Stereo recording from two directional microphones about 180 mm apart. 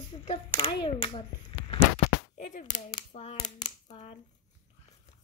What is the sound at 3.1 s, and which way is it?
Hands, 35° left (ahead or behind).